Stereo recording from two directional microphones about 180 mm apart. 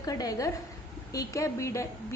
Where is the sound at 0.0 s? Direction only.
20° left (ahead or behind).